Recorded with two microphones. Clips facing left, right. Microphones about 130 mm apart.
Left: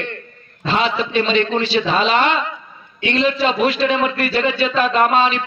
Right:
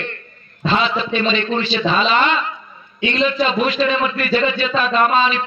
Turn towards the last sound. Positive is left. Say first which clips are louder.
# left 1 dB
turn(degrees=65)  # may be behind; listen again after turning